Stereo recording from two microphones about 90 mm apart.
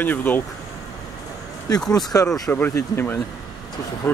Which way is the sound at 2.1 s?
30° left (ahead or behind).